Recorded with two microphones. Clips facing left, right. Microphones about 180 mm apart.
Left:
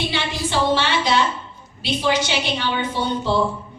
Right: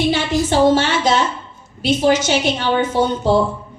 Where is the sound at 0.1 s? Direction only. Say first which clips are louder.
Right 7 dB; 45° right (ahead or behind).